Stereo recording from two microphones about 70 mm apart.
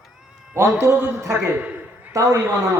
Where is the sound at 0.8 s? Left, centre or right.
Right.